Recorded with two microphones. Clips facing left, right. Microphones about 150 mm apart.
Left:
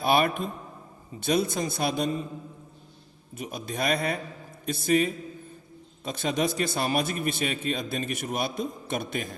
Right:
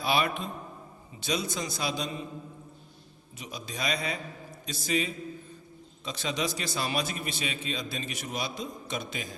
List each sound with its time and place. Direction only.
0.0 s a man's voice: 50° left (ahead or behind)
3.3 s a man's voice: 50° left (ahead or behind)